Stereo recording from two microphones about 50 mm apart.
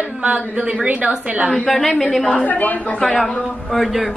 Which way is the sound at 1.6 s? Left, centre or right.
Centre.